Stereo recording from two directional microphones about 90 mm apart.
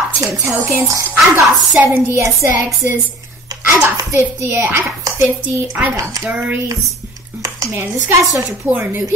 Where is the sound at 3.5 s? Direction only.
35° right (ahead or behind).